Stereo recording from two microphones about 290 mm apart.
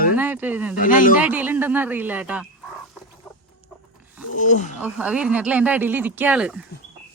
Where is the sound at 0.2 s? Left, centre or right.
Centre.